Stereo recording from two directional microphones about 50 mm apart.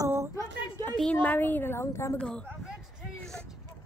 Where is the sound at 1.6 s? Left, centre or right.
Left.